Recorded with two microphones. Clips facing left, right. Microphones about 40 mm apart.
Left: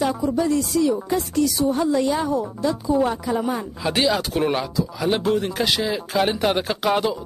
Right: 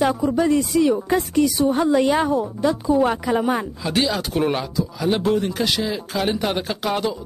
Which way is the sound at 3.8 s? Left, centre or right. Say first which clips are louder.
Left 3 dB; centre.